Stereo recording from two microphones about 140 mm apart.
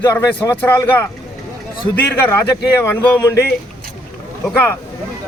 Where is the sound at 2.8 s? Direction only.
15° left (ahead or behind).